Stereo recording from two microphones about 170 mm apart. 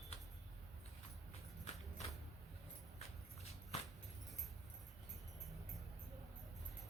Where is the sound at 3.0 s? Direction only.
35° left (ahead or behind).